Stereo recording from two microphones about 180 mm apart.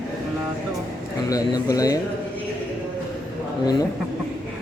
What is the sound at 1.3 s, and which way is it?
Speech, 20° left (ahead or behind).